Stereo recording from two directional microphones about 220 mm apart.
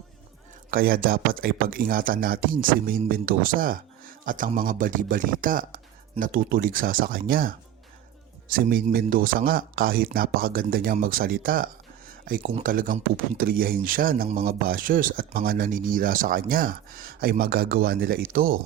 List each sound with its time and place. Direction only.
0.7 s speech: 40° right (ahead or behind)